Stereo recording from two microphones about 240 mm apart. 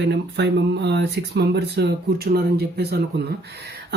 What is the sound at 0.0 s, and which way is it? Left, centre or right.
Speech, right.